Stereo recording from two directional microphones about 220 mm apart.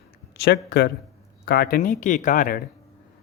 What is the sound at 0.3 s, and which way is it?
Speech, 50° left (ahead or behind).